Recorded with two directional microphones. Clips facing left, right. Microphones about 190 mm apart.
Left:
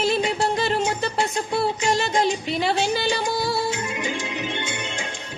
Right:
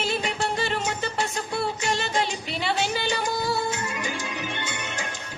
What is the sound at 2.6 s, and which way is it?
Music, 40° left (ahead or behind).